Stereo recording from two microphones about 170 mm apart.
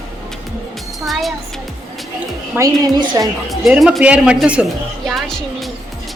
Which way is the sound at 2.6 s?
15° right (ahead or behind).